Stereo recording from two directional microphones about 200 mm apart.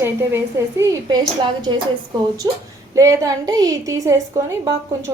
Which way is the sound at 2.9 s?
15° right (ahead or behind).